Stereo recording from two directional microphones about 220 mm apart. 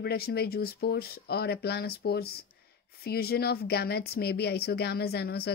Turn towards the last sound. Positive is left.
turn(degrees=45)  # may be behind; listen again after turning